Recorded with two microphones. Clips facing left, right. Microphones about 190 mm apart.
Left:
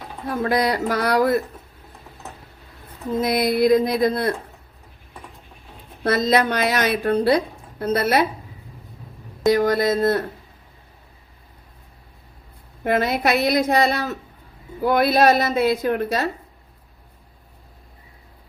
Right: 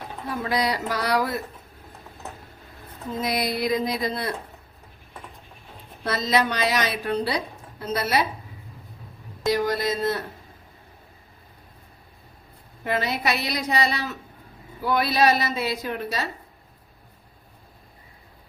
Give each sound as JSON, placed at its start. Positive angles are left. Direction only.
{"t": 0.4, "sound": "a woman's voice", "side_deg": 50}
{"t": 3.2, "sound": "a woman's voice", "side_deg": 55}
{"t": 6.0, "sound": "a woman's voice", "side_deg": 55}
{"t": 9.4, "sound": "a woman's voice", "side_deg": 50}
{"t": 12.8, "sound": "a woman's voice", "side_deg": 50}